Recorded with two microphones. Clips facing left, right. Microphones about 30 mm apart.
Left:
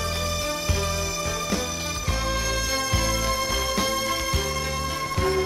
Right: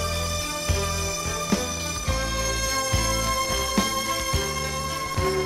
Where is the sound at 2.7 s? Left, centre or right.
Centre.